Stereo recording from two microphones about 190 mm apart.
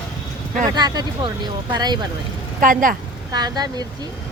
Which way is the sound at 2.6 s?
45° right (ahead or behind).